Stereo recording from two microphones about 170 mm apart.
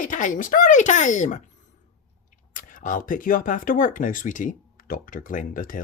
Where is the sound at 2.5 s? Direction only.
50° left (ahead or behind).